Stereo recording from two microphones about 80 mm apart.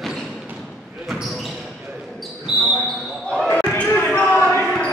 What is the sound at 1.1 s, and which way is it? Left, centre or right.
Basketball bounce, centre.